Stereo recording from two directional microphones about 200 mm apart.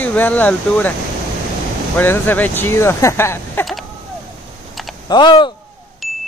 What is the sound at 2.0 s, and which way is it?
Speech, 10° left (ahead or behind).